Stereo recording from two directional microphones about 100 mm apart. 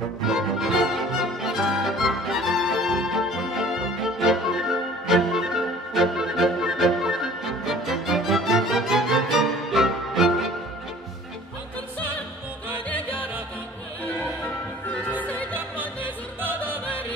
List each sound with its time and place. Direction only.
0.3 s music: 5° right (ahead or behind)
16.3 s music: 20° right (ahead or behind)